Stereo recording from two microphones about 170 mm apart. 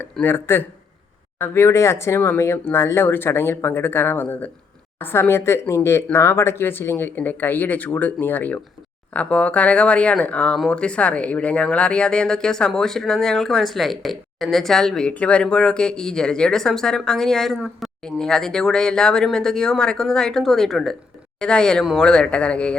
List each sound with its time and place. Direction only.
0.0 s speech: 10° left (ahead or behind)